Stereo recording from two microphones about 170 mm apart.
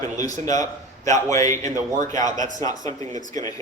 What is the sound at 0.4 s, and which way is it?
A man's voice, 20° left (ahead or behind).